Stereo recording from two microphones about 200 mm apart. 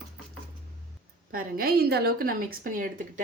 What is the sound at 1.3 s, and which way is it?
A woman's voice, 50° right (ahead or behind).